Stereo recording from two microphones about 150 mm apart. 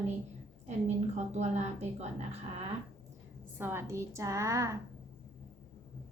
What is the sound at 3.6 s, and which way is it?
A woman's voice, 15° right (ahead or behind).